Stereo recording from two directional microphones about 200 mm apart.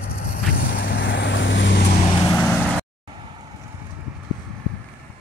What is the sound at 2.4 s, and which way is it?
Vehicle, 5° left (ahead or behind).